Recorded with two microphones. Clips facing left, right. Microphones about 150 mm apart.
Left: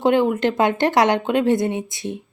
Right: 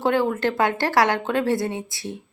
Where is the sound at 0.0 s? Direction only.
20° left (ahead or behind).